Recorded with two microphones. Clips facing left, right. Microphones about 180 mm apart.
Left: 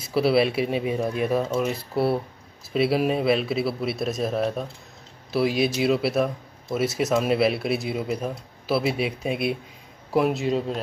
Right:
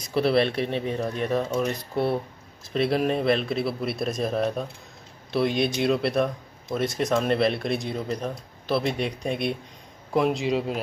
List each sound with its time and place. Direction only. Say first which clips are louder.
0.0 s speech: left 1 dB; 5° left (ahead or behind)